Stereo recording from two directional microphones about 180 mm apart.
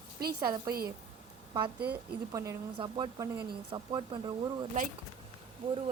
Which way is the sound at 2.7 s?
30° right (ahead or behind).